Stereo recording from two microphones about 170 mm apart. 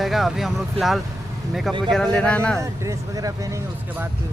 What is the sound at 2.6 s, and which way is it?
Speech, 20° right (ahead or behind).